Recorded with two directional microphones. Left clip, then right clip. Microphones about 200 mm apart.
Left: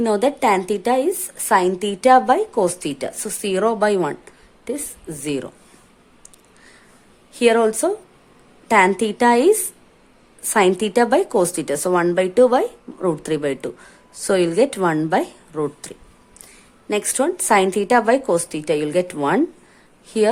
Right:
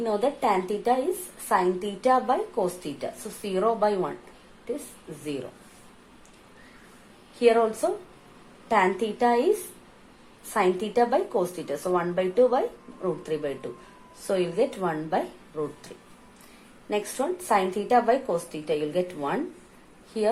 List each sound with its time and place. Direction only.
0.0 s speech: 50° left (ahead or behind)
7.3 s speech: 55° left (ahead or behind)
10.5 s speech: 50° left (ahead or behind)
16.9 s speech: 50° left (ahead or behind)